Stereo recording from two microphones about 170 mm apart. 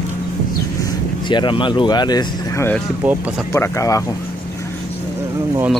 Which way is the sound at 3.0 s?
10° right (ahead or behind).